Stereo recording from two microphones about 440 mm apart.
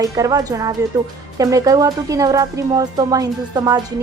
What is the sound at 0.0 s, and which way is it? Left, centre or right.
Speech, centre.